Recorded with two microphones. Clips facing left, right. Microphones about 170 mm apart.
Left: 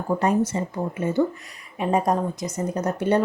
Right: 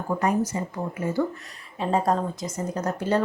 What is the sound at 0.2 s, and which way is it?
A woman's voice, 30° left (ahead or behind).